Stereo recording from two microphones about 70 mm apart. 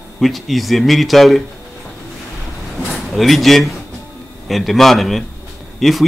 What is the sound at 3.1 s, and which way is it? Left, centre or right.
Speech, centre.